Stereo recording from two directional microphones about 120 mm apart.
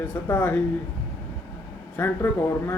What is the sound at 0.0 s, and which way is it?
Speech, 15° left (ahead or behind).